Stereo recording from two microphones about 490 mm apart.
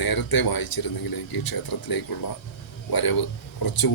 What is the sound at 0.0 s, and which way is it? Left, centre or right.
Speech, left.